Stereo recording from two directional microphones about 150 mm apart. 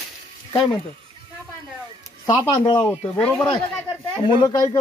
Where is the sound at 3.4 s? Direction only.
30° left (ahead or behind).